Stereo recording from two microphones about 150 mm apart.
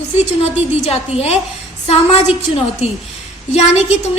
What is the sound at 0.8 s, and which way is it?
Speech, 45° left (ahead or behind).